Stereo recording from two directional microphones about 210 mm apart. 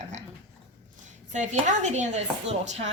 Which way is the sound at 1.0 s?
35° right (ahead or behind).